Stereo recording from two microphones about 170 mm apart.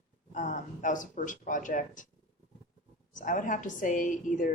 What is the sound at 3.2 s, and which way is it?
A woman's voice, 50° left (ahead or behind).